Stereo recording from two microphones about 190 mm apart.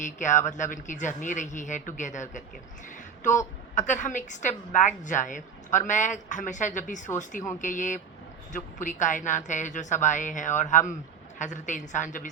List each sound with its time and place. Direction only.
0.0 s a woman's voice: 40° left (ahead or behind)
3.8 s a woman's voice: 40° left (ahead or behind)